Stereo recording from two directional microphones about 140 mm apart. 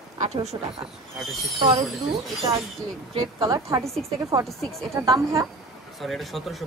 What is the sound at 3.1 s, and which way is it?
Speech, 40° right (ahead or behind).